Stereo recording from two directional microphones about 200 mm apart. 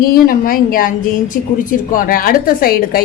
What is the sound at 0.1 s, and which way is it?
A woman's voice, 45° left (ahead or behind).